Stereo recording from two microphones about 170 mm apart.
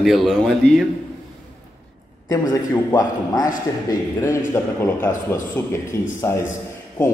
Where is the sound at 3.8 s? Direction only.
15° left (ahead or behind).